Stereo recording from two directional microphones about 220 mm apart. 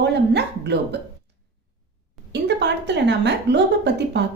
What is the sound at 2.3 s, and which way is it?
A woman's voice, 50° right (ahead or behind).